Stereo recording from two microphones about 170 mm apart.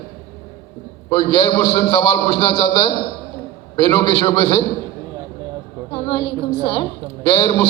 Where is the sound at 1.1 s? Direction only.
30° left (ahead or behind).